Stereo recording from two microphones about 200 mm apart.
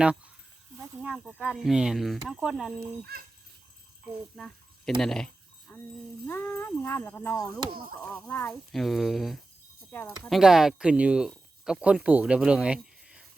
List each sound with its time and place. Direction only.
0.8 s speech: 5° right (ahead or behind)
4.9 s a sound: centre (ahead or behind)
6.2 s speech: 10° left (ahead or behind)
7.7 s chop: 50° right (ahead or behind)
8.3 s speech: 5° left (ahead or behind)